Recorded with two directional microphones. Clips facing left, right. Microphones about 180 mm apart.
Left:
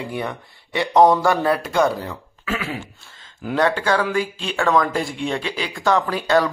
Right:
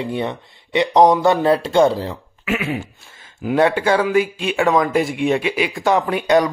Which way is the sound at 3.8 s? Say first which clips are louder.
Right 4 dB; 20° right (ahead or behind).